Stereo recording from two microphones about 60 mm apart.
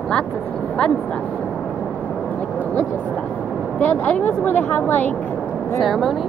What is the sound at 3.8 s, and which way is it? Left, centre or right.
Speech, left.